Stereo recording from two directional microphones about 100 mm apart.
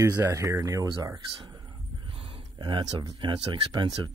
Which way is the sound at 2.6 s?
50° right (ahead or behind).